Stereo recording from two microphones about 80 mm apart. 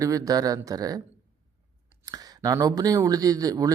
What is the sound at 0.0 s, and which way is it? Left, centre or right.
Speech, right.